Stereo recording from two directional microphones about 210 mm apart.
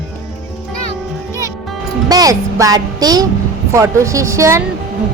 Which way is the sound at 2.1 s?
15° right (ahead or behind).